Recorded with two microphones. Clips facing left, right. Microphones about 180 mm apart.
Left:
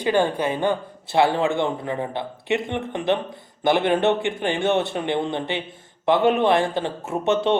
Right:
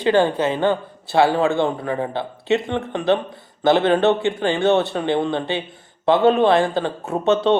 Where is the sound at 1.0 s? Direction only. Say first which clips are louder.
Right 3 dB; 20° left (ahead or behind).